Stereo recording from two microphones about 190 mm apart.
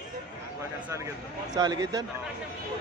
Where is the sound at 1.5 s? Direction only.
20° right (ahead or behind).